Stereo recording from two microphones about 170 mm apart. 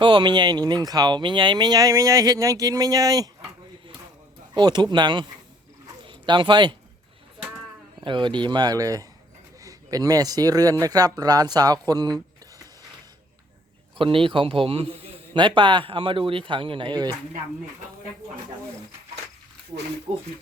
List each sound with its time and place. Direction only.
0.0 s speech: 30° right (ahead or behind)
4.5 s speech: 25° right (ahead or behind)
8.0 s speech: 25° right (ahead or behind)
14.0 s a man's voice: 30° right (ahead or behind)
20.1 s speech: 10° right (ahead or behind)